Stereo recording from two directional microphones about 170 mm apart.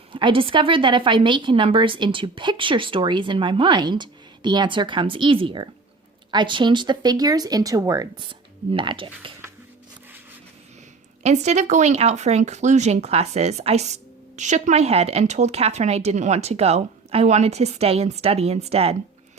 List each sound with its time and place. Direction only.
0.1 s a woman's voice: 30° right (ahead or behind)
11.2 s speech: 40° right (ahead or behind)